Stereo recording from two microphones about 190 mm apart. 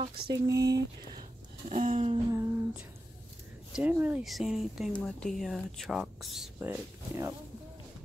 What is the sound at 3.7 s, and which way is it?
Speech, 10° right (ahead or behind).